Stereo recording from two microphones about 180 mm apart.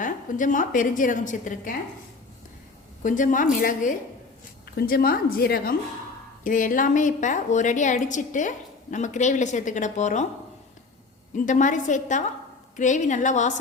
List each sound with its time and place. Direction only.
0.0 s a woman's voice: 45° left (ahead or behind)
3.0 s a woman's voice: 45° left (ahead or behind)
11.3 s a woman's voice: 45° left (ahead or behind)